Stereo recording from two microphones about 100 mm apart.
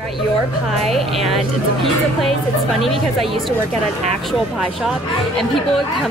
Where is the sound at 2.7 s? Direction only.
Centre (ahead or behind).